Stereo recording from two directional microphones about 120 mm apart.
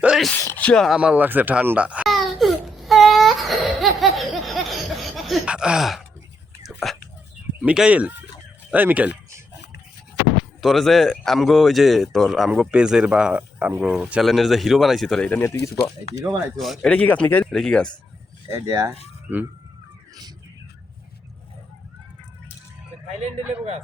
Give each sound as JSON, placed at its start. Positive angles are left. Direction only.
{"t": 0.0, "sound": "a sound", "side_deg": -5}
{"t": 0.3, "sound": "speech", "side_deg": 15}
{"t": 0.9, "sound": "speech", "side_deg": -10}
{"t": 2.0, "sound": "baby cry", "side_deg": 0}
{"t": 3.8, "sound": "laughter", "side_deg": 0}
{"t": 6.7, "sound": "whispering", "side_deg": 0}
{"t": 7.6, "sound": "speech", "side_deg": -10}
{"t": 10.6, "sound": "speech", "side_deg": 0}
{"t": 15.3, "sound": "speech", "side_deg": 20}
{"t": 16.6, "sound": "speech", "side_deg": 0}
{"t": 18.4, "sound": "speech", "side_deg": -25}